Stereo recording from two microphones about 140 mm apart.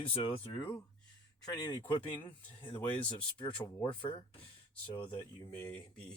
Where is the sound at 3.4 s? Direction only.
35° left (ahead or behind).